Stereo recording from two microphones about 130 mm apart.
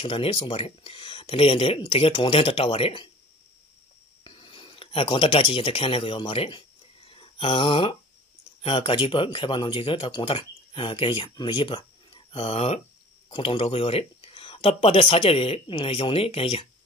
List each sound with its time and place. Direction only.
0.0 s speech: 45° left (ahead or behind)
4.2 s speech: 40° left (ahead or behind)
7.1 s a sound: 45° left (ahead or behind)
8.6 s speech: 40° left (ahead or behind)
15.6 s speech: 35° left (ahead or behind)
15.9 s speech: 45° left (ahead or behind)